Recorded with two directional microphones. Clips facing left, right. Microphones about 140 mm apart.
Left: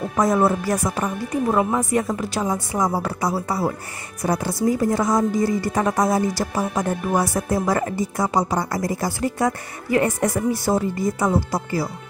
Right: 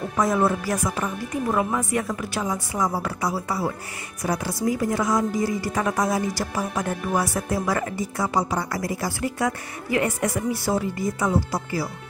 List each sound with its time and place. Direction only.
0.2 s a woman's voice: 40° left (ahead or behind)